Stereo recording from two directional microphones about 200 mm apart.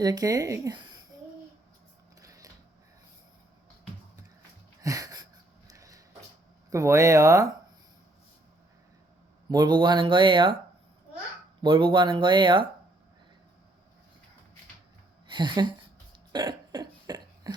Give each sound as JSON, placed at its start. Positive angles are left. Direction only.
{"t": 0.0, "sound": "speech", "side_deg": -20}
{"t": 2.2, "sound": "a sound", "side_deg": -15}
{"t": 4.8, "sound": "wheeze", "side_deg": -15}
{"t": 5.6, "sound": "a sound", "side_deg": -15}
{"t": 6.7, "sound": "speech", "side_deg": -15}
{"t": 9.5, "sound": "speech", "side_deg": -20}
{"t": 11.6, "sound": "speech", "side_deg": -25}
{"t": 15.3, "sound": "speech", "side_deg": -20}
{"t": 16.3, "sound": "cough", "side_deg": -20}